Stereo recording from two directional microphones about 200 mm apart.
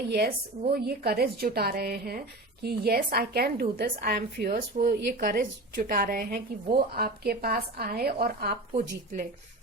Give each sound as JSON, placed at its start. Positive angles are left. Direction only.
{"t": 0.1, "sound": "a woman's voice", "side_deg": -50}
{"t": 8.7, "sound": "speech", "side_deg": -35}